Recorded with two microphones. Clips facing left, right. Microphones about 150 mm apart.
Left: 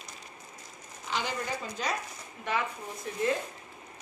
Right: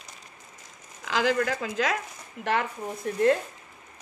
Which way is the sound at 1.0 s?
90° right.